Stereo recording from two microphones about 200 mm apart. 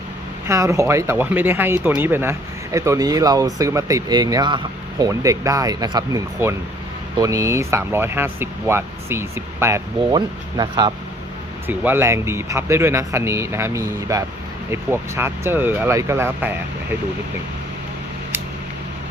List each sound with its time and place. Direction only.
0.4 s speech: 15° right (ahead or behind)
11.7 s speech: 10° right (ahead or behind)